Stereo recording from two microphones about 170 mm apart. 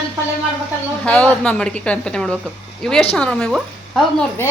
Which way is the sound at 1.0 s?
5° left (ahead or behind).